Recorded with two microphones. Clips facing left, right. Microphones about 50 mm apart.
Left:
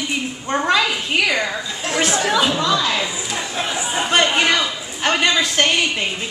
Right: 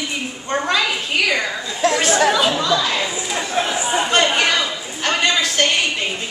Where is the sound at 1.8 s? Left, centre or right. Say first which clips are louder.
Right 8 dB; right.